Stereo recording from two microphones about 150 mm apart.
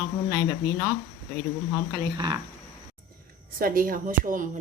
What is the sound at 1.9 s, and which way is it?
Speech, 25° right (ahead or behind).